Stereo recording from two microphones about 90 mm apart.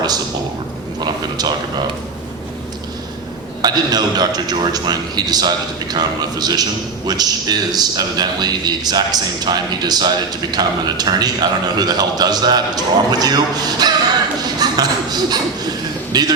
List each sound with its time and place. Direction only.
3.6 s a man's voice: 50° right (ahead or behind)